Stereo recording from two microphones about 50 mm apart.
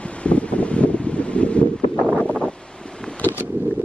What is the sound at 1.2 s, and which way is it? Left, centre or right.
Wind, left.